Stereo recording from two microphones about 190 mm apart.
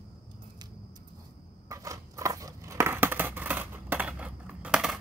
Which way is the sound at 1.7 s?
15° right (ahead or behind).